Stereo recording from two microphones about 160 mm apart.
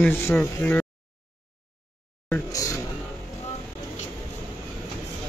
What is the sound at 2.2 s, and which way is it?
Speech, 15° left (ahead or behind).